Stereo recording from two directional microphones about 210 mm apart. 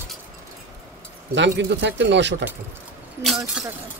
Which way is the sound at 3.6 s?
5° right (ahead or behind).